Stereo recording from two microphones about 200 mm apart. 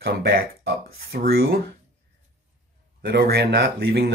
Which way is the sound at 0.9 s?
50° right (ahead or behind).